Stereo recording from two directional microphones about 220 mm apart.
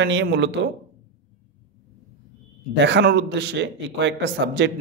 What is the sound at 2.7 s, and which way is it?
Speech, 55° right (ahead or behind).